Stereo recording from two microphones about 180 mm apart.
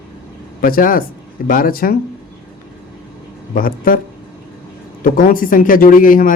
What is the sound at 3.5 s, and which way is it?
Speech, 50° left (ahead or behind).